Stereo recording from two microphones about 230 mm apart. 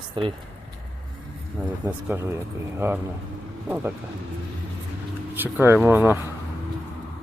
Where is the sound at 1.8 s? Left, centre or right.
Centre.